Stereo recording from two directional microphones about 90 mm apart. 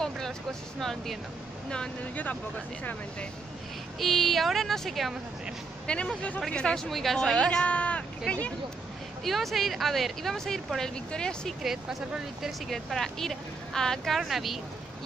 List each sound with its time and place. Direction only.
0.0 s speech: 5° left (ahead or behind)
4.0 s speech: centre (ahead or behind)
9.2 s speech: centre (ahead or behind)
11.6 s speech: 5° right (ahead or behind)